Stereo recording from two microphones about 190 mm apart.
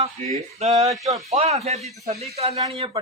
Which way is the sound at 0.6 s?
35° right (ahead or behind).